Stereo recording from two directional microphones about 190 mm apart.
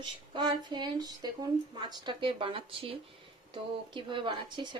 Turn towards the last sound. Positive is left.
turn(degrees=-25)  # may be behind; listen again after turning